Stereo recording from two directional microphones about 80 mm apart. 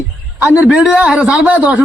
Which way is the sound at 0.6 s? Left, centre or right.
Centre.